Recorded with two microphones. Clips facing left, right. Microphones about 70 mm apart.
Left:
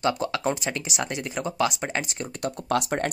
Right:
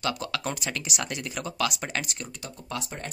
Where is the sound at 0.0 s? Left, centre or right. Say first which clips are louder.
Left 5 dB; left.